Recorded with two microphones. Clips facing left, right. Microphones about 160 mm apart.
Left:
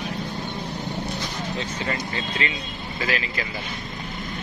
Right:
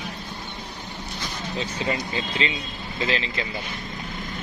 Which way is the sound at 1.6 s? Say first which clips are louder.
Right 4 dB; 15° right (ahead or behind).